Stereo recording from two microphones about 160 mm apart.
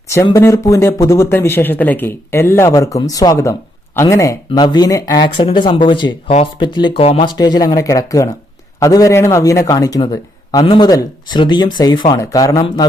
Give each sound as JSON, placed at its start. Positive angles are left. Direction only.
{"t": 0.3, "sound": "speech", "side_deg": 20}